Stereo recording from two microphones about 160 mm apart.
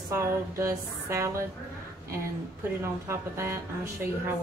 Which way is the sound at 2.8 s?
15° right (ahead or behind).